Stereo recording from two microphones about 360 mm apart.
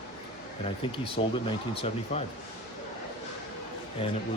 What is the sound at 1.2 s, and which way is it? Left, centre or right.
Speech, centre.